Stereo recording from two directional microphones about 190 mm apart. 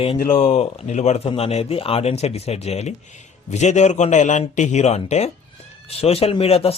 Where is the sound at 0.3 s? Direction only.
35° left (ahead or behind).